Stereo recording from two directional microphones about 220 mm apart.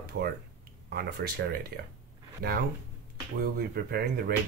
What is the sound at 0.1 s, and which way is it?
Speech, 50° right (ahead or behind).